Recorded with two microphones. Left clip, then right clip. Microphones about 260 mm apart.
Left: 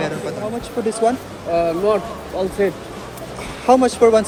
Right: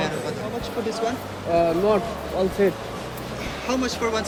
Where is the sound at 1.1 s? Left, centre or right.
Centre.